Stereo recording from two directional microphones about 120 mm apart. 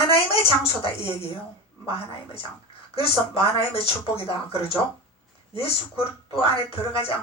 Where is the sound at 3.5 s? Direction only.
55° left (ahead or behind).